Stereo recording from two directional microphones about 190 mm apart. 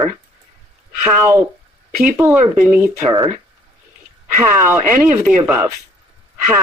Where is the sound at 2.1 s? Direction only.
10° right (ahead or behind).